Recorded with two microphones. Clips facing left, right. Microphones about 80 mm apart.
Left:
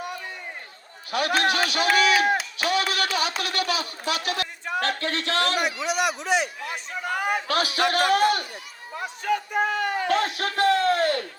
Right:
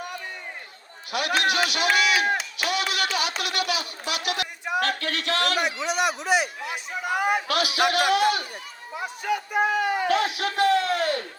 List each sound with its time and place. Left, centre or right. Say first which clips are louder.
1.1 s speech: left 1 dB; left
2.0 s a sound: left 4 dB; left
2.2 s a sound: left 2 dB; centre
2.6 s a sound: left 2 dB; left
4.8 s speech: left 1 dB; left
5.8 s speech: even; centre
7.4 s speech: even; left
9.0 s speech: left 1 dB; centre
10.1 s speech: even; left